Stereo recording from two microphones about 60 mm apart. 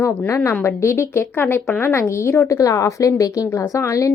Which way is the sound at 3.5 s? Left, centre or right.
Left.